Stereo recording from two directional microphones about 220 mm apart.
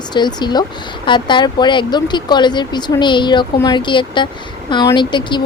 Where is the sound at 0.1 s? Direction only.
20° left (ahead or behind).